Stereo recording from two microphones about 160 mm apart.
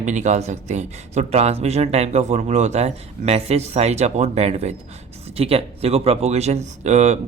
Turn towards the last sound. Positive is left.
turn(degrees=-45)  # may be behind; listen again after turning